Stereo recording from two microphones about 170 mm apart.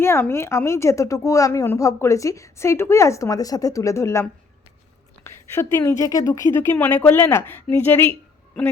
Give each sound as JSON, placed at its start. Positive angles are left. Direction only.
{"t": 0.0, "sound": "a woman's voice", "side_deg": 15}
{"t": 5.7, "sound": "a woman's voice", "side_deg": 15}